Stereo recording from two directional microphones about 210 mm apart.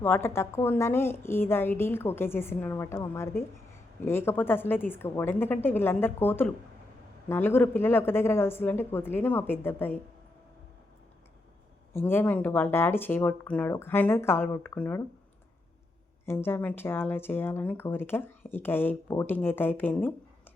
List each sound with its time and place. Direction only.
0.0 s speech: 10° left (ahead or behind)
11.9 s speech: 10° left (ahead or behind)
16.2 s speech: 10° left (ahead or behind)